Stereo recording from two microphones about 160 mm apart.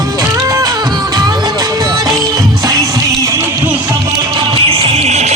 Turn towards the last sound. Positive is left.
turn(degrees=-45)  # may be behind; listen again after turning